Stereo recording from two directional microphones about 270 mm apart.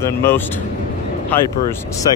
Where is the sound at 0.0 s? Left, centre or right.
Centre.